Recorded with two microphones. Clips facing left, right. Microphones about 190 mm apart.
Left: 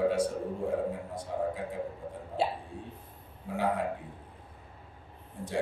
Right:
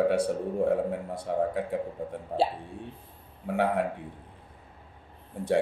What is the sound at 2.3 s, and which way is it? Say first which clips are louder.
A man's voice: right 4 dB; 65° right (ahead or behind).